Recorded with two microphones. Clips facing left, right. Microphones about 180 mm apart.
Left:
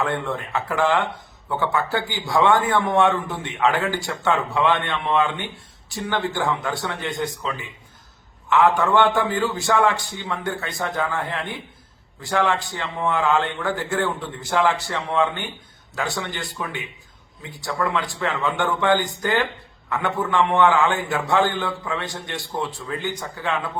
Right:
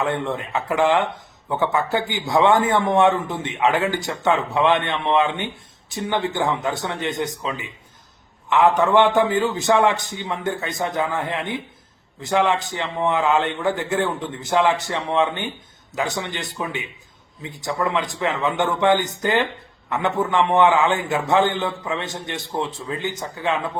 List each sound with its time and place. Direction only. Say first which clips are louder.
0.0 s a man's voice: right 1 dB; 20° right (ahead or behind)